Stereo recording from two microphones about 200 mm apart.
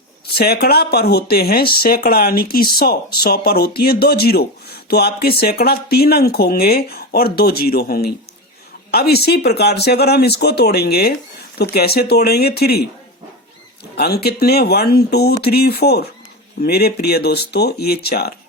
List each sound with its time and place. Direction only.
0.3 s speech: 50° left (ahead or behind)
13.9 s speech: 50° left (ahead or behind)